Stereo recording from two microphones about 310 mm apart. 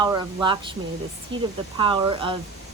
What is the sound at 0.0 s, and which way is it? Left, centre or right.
Speech, centre.